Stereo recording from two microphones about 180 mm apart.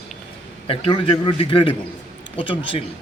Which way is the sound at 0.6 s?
30° left (ahead or behind).